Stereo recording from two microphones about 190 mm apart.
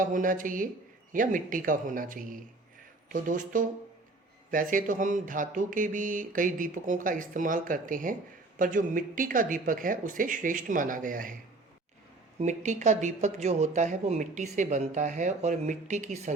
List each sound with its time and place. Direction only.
0.0 s speech: 45° right (ahead or behind)
12.4 s speech: 40° right (ahead or behind)